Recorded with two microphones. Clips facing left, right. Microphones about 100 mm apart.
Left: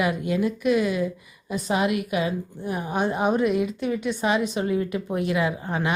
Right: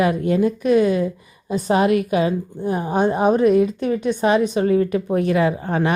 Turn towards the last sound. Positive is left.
turn(degrees=-40)  # may be behind; listen again after turning